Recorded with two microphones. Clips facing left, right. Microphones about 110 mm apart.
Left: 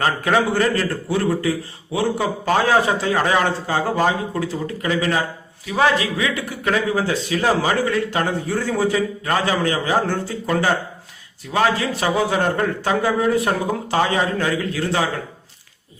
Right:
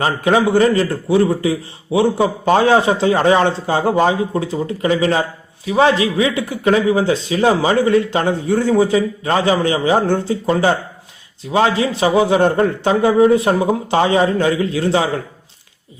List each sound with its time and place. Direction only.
0.0 s a man's voice: 20° right (ahead or behind)